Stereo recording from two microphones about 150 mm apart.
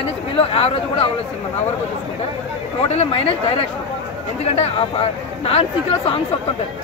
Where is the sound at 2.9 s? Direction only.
40° left (ahead or behind).